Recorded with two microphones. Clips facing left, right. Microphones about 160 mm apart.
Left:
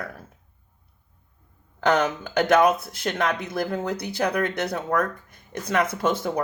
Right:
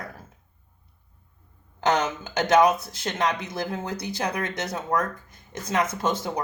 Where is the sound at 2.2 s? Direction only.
55° left (ahead or behind).